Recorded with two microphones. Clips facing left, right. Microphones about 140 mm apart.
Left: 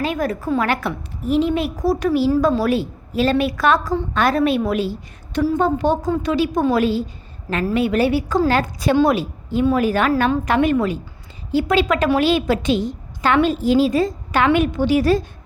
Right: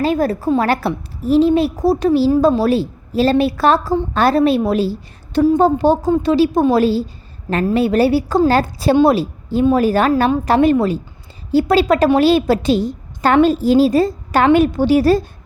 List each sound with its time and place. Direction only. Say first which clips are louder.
0.0 s a woman's voice: right 5 dB; 35° right (ahead or behind)